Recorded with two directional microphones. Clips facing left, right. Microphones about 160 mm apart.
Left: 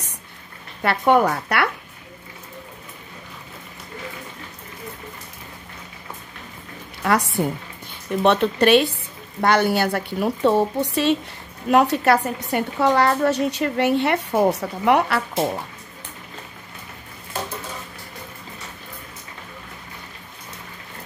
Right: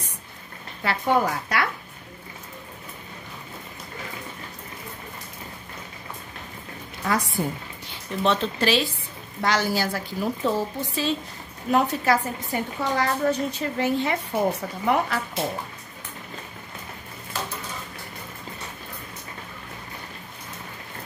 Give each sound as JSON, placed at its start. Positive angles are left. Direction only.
{"t": 0.8, "sound": "a woman's voice", "side_deg": 65}
{"t": 7.1, "sound": "a woman's voice", "side_deg": 70}